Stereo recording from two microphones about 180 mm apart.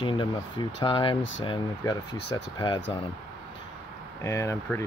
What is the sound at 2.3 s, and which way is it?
Speech, 25° left (ahead or behind).